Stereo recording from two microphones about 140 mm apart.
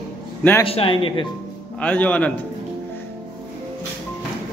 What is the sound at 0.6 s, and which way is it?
Speech, 40° left (ahead or behind).